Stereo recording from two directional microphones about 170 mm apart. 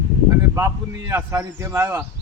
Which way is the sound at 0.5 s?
20° right (ahead or behind).